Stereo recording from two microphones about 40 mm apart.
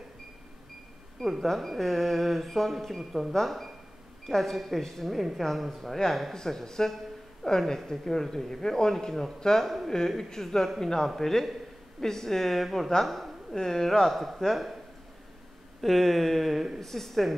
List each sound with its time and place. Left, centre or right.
1.2 s speech: centre
6.3 s speech: centre
13.0 s a sound: centre
13.6 s speech: centre
15.8 s speech: centre